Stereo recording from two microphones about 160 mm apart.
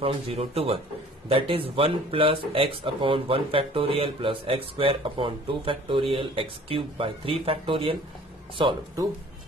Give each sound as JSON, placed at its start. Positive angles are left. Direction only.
{"t": 0.0, "sound": "speech", "side_deg": -40}